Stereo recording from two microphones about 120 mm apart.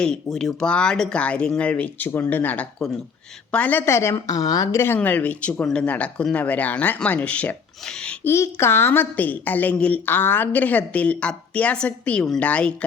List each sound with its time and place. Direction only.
0.0 s a woman's voice: 5° left (ahead or behind)
8.3 s a woman's voice: 20° left (ahead or behind)